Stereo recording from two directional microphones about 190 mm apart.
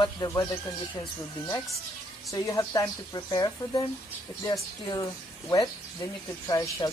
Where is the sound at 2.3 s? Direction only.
20° left (ahead or behind).